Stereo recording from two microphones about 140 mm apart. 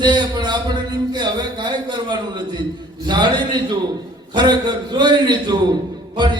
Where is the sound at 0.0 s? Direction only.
30° right (ahead or behind).